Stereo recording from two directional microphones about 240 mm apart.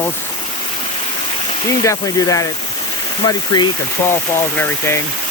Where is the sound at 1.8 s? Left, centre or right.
Centre.